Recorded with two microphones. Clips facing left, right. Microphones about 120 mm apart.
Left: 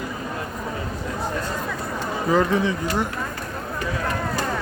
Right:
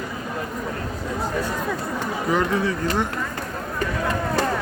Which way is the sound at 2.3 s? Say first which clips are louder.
Left 2 dB; 30° left (ahead or behind).